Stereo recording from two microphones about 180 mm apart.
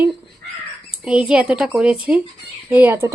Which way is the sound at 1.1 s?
5° right (ahead or behind).